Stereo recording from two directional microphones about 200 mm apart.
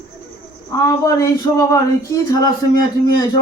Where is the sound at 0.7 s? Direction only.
15° left (ahead or behind).